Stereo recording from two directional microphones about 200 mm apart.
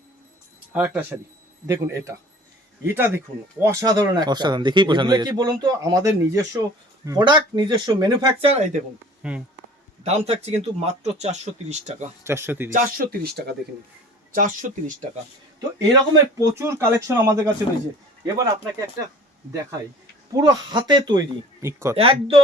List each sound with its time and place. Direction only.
0.7 s speech: 5° right (ahead or behind); by 8.8 s 35° right (ahead or behind)
9.2 s speech: 5° right (ahead or behind)
10.0 s speech: 30° right (ahead or behind)
12.2 s speech: 10° right (ahead or behind)
12.7 s speech: 45° right (ahead or behind)
14.3 s speech: 40° right (ahead or behind)
15.9 s speech: 15° right (ahead or behind)
20.3 s speech: 20° right (ahead or behind)
21.9 s speech: 30° right (ahead or behind)